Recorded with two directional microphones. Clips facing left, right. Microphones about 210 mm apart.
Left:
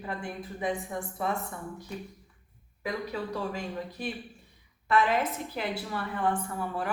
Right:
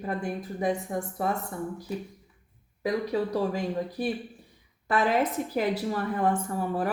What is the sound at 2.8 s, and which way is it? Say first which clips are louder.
Speech: right 6 dB; 35° right (ahead or behind).